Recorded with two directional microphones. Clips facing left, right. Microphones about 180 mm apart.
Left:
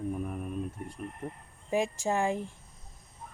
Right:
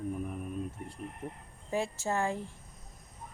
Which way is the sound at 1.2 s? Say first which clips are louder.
Left 2 dB; 90° left.